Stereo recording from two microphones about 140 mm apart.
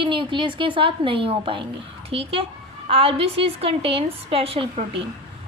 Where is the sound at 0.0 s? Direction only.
35° right (ahead or behind).